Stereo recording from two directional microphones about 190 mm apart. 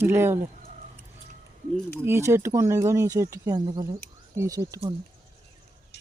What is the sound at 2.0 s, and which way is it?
Speech, 15° right (ahead or behind).